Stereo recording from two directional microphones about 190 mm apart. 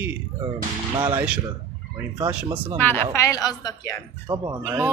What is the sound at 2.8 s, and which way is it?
A woman's voice, 10° left (ahead or behind).